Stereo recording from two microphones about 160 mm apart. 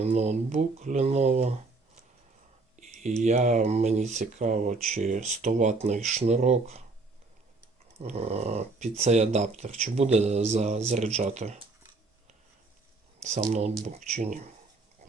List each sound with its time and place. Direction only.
0.0 s speech: 40° right (ahead or behind)
2.8 s a sound: 50° right (ahead or behind)
3.2 s speech: 45° right (ahead or behind)
7.9 s speech: 40° right (ahead or behind)
13.5 s speech: 45° right (ahead or behind)